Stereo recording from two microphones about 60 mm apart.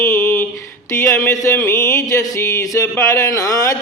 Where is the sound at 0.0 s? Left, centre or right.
Left.